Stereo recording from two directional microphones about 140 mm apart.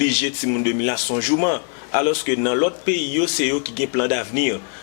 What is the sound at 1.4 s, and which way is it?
A man's voice, 15° left (ahead or behind).